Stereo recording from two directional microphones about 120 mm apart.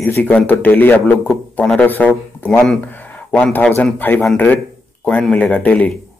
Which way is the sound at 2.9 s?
15° left (ahead or behind).